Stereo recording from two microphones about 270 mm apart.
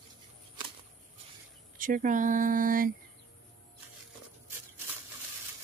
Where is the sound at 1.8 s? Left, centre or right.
Right.